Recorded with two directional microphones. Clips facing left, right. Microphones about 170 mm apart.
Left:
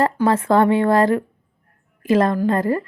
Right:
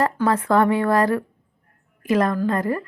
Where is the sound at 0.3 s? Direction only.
25° left (ahead or behind).